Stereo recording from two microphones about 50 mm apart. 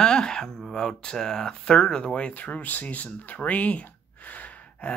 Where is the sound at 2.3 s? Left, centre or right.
Left.